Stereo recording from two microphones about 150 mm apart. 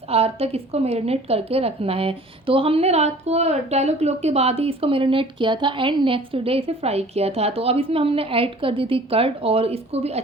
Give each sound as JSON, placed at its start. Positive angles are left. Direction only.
{"t": 0.1, "sound": "a woman's voice", "side_deg": -40}